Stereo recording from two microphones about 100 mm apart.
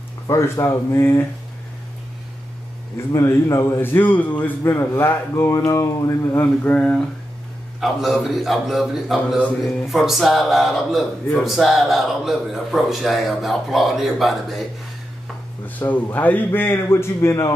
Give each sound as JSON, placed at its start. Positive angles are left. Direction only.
{"t": 0.3, "sound": "a man's voice", "side_deg": 30}
{"t": 3.1, "sound": "a man's voice", "side_deg": 30}
{"t": 5.5, "sound": "a sound", "side_deg": 35}
{"t": 7.8, "sound": "speech", "side_deg": 0}
{"t": 15.8, "sound": "a man's voice", "side_deg": 15}